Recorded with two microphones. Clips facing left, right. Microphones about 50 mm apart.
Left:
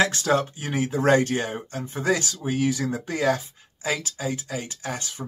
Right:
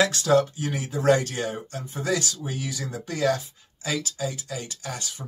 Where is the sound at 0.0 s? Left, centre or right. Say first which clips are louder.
Right 1 dB; left.